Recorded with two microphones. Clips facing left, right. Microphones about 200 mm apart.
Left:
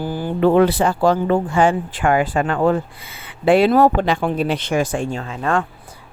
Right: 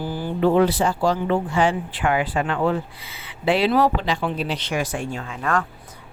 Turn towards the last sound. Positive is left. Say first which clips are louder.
# left 4 dB
turn(degrees=30)  # may be behind; listen again after turning